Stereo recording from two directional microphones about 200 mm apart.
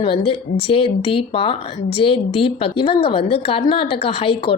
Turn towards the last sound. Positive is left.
turn(degrees=25)  # may be behind; listen again after turning